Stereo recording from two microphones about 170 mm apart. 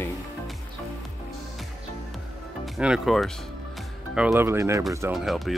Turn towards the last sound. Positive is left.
turn(degrees=0)  # may be behind; listen again after turning